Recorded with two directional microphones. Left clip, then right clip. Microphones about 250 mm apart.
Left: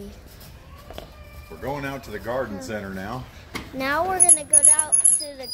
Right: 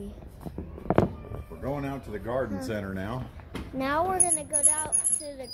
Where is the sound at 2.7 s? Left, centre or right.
Right.